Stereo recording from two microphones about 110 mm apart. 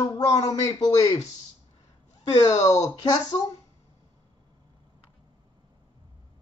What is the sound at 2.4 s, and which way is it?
A man's voice, 30° left (ahead or behind).